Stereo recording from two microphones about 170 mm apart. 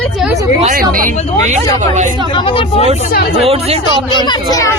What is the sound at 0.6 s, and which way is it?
Speech, 50° right (ahead or behind).